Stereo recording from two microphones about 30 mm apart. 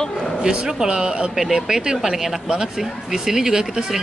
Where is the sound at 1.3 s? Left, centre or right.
Centre.